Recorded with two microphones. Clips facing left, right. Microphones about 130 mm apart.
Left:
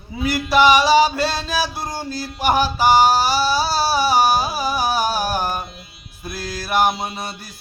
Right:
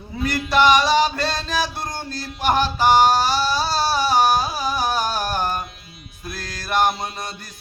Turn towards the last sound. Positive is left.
turn(degrees=5)  # may be behind; listen again after turning